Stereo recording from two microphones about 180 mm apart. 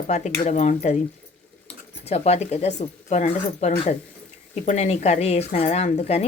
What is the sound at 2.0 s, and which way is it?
Speech, 35° left (ahead or behind).